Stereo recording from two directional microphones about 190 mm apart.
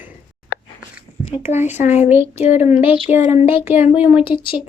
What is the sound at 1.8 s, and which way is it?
Speech, 40° left (ahead or behind).